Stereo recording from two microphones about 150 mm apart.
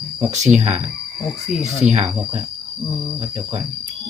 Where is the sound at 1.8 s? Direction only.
45° right (ahead or behind).